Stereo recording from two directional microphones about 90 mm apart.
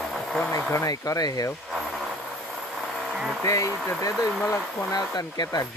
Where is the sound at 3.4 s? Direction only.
35° left (ahead or behind).